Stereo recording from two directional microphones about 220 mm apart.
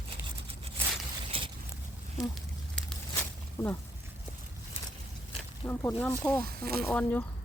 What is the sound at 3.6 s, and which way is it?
Speech, 10° left (ahead or behind).